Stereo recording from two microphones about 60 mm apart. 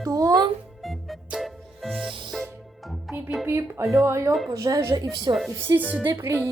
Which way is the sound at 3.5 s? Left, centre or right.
Right.